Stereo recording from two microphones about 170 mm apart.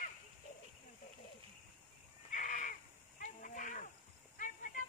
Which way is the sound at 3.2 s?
50° left (ahead or behind).